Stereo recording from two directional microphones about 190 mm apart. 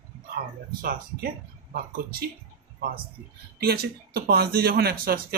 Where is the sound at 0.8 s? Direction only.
50° right (ahead or behind).